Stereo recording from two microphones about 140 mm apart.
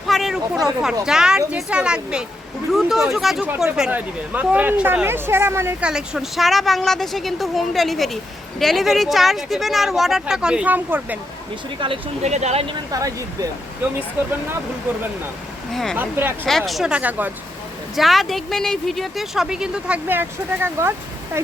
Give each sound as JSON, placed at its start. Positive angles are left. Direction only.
{"t": 0.1, "sound": "a sound", "side_deg": 0}
{"t": 1.0, "sound": "speech", "side_deg": -5}
{"t": 5.8, "sound": "speech", "side_deg": -5}
{"t": 12.2, "sound": "speech", "side_deg": -55}
{"t": 12.9, "sound": "speech", "side_deg": -25}
{"t": 15.7, "sound": "speech", "side_deg": 0}
{"t": 16.0, "sound": "speech", "side_deg": -15}
{"t": 16.5, "sound": "speech", "side_deg": 0}
{"t": 17.9, "sound": "speech", "side_deg": 0}